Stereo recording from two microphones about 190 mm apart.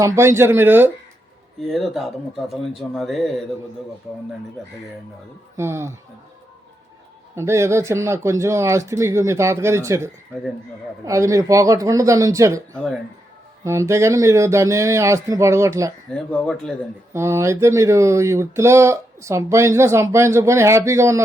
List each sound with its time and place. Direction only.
0.0 s speech: 15° right (ahead or behind)
1.6 s speech: centre (ahead or behind)
5.5 s speech: 15° right (ahead or behind)
7.3 s speech: 15° right (ahead or behind)
13.7 s speech: 15° right (ahead or behind)
16.1 s speech: 5° left (ahead or behind)
17.2 s speech: 15° right (ahead or behind)